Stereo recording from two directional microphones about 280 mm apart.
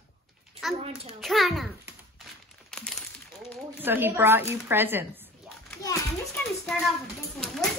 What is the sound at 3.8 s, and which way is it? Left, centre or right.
A woman's voice, centre.